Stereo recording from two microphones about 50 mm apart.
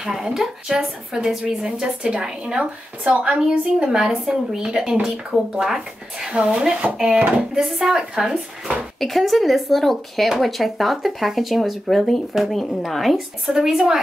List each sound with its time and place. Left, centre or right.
0.0 s speech: centre
9.0 s speech: centre